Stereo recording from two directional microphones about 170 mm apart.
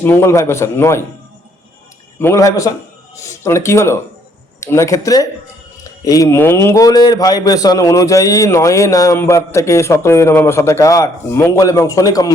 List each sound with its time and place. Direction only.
0.0 s a man's voice: 15° left (ahead or behind)
2.1 s a man's voice: 15° left (ahead or behind)